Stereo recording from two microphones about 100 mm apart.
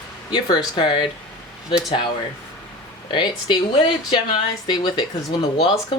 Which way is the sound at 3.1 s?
55° left (ahead or behind).